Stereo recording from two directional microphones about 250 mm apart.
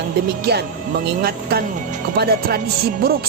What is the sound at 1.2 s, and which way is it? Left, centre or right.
Speech, right.